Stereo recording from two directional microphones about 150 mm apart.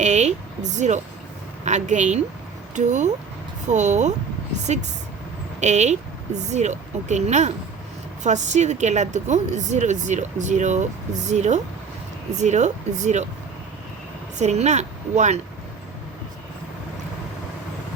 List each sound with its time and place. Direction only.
0.0 s a woman's voice: 50° right (ahead or behind)
5.5 s a woman's voice: 50° right (ahead or behind)
14.3 s speech: 50° right (ahead or behind)